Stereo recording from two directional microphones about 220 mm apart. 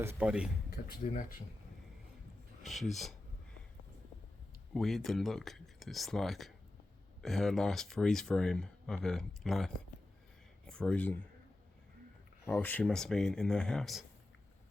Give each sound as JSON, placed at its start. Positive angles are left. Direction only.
{"t": 0.0, "sound": "speech", "side_deg": -10}
{"t": 0.7, "sound": "speech", "side_deg": 45}
{"t": 2.6, "sound": "speech", "side_deg": 0}
{"t": 4.7, "sound": "speech", "side_deg": 0}
{"t": 12.5, "sound": "speech", "side_deg": 10}